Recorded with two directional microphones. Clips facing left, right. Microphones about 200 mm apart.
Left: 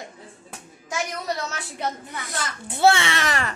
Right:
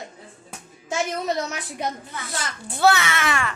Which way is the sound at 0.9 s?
20° right (ahead or behind).